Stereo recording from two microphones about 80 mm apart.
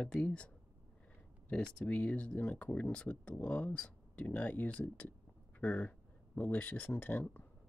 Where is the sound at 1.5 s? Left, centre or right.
Centre.